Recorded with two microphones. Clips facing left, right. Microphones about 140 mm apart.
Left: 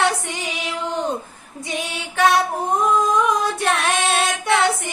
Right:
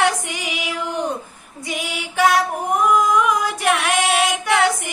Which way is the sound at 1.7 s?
25° left (ahead or behind).